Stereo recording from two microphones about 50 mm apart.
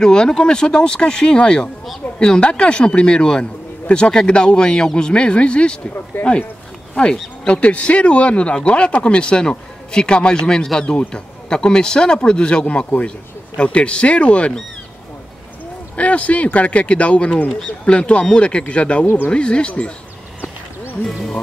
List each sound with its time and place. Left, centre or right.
0.0 s speech: centre
6.2 s speech: left
7.4 s speech: left
16.0 s speech: left